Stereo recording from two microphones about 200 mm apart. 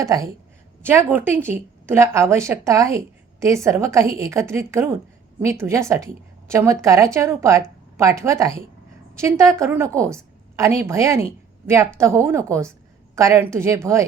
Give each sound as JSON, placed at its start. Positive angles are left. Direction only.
{"t": 0.0, "sound": "a woman's voice", "side_deg": -15}